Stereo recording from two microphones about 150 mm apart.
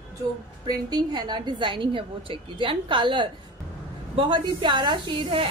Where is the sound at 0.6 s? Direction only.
25° right (ahead or behind).